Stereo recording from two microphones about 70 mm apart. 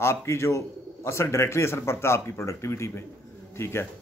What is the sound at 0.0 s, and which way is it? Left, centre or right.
A man's voice, left.